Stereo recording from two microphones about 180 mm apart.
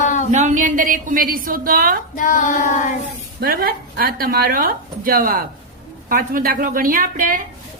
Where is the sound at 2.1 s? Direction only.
45° left (ahead or behind).